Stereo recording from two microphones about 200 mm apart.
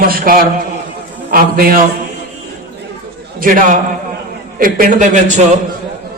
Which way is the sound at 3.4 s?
45° right (ahead or behind).